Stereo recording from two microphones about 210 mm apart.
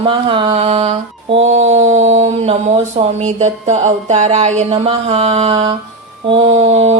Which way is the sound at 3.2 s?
35° right (ahead or behind).